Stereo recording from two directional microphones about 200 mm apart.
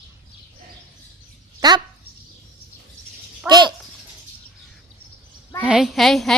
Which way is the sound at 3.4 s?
20° right (ahead or behind).